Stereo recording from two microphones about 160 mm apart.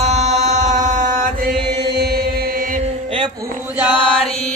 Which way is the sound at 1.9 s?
90° right.